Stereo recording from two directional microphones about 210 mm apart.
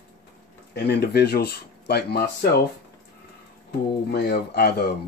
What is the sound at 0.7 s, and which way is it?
Speech, 50° left (ahead or behind).